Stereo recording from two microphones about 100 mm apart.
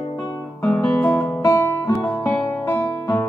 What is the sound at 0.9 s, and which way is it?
Music, 25° left (ahead or behind).